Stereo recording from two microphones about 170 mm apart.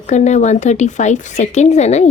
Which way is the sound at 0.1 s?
45° left (ahead or behind).